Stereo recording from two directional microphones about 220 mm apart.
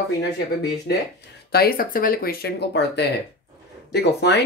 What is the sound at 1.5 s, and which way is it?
Speech, 45° left (ahead or behind).